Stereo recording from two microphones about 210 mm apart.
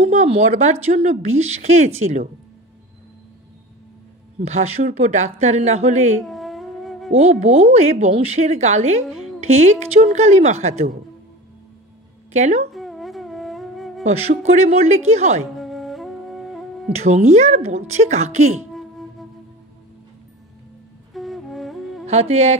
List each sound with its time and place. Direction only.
0.0 s a woman's voice: 30° right (ahead or behind)
4.4 s a woman's voice: 30° right (ahead or behind)
6.2 s a sound: centre (ahead or behind)
7.2 s a woman's voice: 30° right (ahead or behind)
12.3 s speech: 35° right (ahead or behind)
12.7 s music: centre (ahead or behind)
14.0 s a woman's voice: 30° right (ahead or behind)
15.5 s music: centre (ahead or behind)
16.9 s a woman's voice: 30° right (ahead or behind)
18.7 s music: centre (ahead or behind)
21.1 s music: centre (ahead or behind)
22.0 s speech: 30° right (ahead or behind)